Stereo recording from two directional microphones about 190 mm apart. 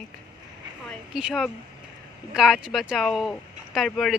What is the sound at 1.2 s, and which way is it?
Speech, 5° right (ahead or behind).